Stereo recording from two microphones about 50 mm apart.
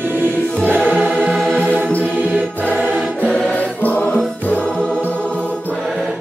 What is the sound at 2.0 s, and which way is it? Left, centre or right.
Music, right.